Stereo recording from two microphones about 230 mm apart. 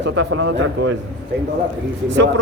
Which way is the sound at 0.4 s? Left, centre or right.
Right.